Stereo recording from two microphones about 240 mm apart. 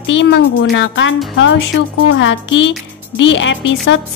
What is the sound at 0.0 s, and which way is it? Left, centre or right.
A woman's voice, left.